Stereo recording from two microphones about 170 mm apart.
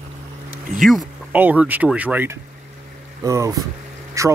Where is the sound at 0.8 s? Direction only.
5° right (ahead or behind).